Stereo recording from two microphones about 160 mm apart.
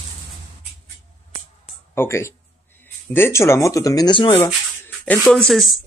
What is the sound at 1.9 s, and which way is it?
Speech, 15° left (ahead or behind).